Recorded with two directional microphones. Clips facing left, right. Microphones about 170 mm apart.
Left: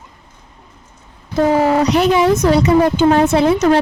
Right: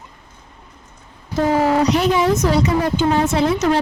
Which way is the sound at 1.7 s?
70° left (ahead or behind).